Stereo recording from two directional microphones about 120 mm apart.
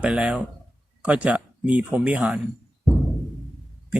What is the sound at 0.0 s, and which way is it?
A man's voice, 10° right (ahead or behind).